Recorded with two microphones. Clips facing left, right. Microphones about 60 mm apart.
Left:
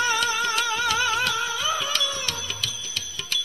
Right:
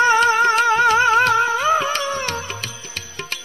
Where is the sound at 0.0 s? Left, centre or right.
Right.